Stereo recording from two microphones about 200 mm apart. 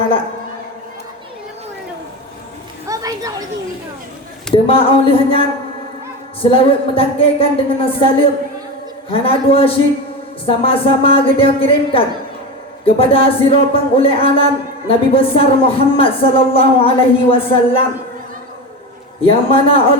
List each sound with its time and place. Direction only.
2.8 s a sound: 15° right (ahead or behind)
4.5 s speech: 30° left (ahead or behind)
9.0 s speech: 30° left (ahead or behind)
19.2 s speech: 25° left (ahead or behind)